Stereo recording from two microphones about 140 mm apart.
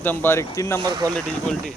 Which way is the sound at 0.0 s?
15° left (ahead or behind).